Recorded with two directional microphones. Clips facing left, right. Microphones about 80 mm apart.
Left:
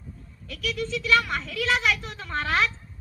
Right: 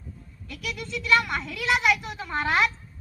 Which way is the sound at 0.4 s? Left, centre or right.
Centre.